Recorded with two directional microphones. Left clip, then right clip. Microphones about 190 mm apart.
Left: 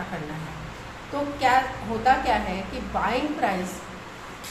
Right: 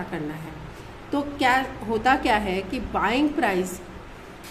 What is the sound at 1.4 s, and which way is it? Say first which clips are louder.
A woman's voice: left 1 dB; 40° right (ahead or behind).